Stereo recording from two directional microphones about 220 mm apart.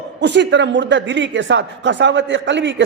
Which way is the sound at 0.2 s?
50° right (ahead or behind).